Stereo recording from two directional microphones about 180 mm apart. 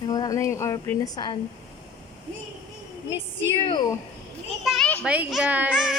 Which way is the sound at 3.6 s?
25° left (ahead or behind).